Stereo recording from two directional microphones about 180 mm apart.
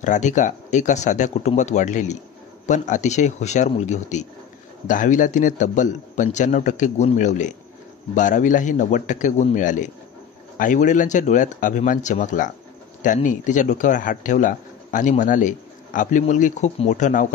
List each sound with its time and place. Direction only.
0.0 s speech: 45° left (ahead or behind)